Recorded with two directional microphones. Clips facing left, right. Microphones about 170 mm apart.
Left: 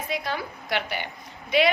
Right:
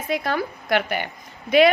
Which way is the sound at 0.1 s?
50° right (ahead or behind).